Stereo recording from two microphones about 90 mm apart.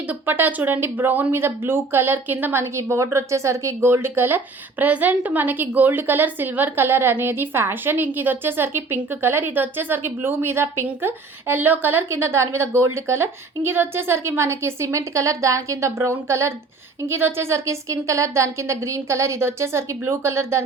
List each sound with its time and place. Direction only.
0.1 s speech: 20° right (ahead or behind)